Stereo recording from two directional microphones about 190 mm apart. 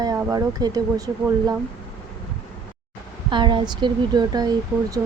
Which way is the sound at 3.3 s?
25° right (ahead or behind).